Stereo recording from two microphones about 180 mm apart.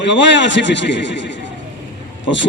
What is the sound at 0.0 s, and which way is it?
A man's voice, 80° left.